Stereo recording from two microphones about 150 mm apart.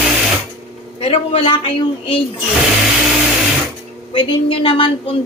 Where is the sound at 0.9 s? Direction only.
40° left (ahead or behind).